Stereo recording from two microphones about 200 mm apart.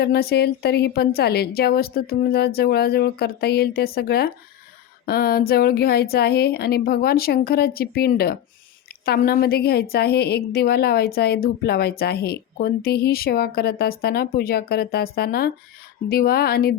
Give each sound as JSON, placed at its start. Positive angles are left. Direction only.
{"t": 0.0, "sound": "a woman's voice", "side_deg": 50}